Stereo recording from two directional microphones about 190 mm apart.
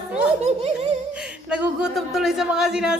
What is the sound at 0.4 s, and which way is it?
Speech, 35° right (ahead or behind).